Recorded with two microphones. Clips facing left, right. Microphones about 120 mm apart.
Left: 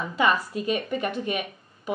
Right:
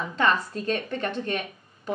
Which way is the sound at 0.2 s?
10° left (ahead or behind).